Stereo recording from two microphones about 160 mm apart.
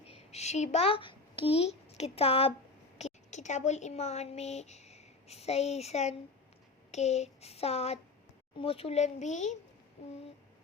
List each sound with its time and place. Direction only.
0.1 s a woman's voice: 40° left (ahead or behind)
6.9 s a sound: 45° left (ahead or behind)
8.5 s speech: 35° left (ahead or behind)